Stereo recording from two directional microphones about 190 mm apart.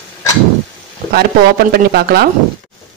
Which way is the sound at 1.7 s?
55° right (ahead or behind).